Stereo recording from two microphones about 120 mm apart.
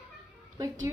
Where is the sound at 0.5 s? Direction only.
25° right (ahead or behind).